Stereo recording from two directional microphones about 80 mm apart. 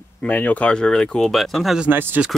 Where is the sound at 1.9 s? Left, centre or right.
Right.